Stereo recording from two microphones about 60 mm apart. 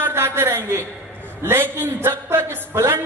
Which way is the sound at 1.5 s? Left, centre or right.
Right.